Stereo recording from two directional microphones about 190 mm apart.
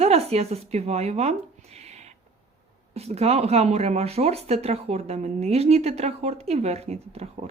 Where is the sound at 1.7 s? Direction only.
35° right (ahead or behind).